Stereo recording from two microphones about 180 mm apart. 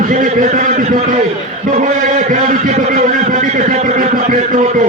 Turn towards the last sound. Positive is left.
turn(degrees=-45)  # may be behind; listen again after turning